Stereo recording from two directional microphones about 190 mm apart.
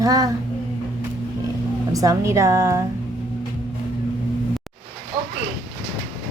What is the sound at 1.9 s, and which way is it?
Speech, 15° right (ahead or behind).